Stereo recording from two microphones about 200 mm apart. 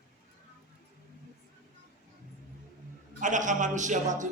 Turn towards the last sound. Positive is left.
turn(degrees=-40)  # may be behind; listen again after turning